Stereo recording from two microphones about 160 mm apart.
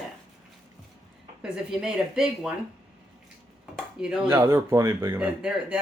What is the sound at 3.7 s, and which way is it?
Dishes, 5° right (ahead or behind).